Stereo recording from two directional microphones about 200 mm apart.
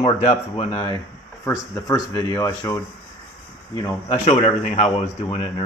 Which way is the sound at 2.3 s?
20° left (ahead or behind).